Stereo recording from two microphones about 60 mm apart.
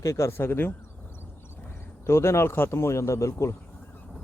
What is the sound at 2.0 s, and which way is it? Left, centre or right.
Speech, left.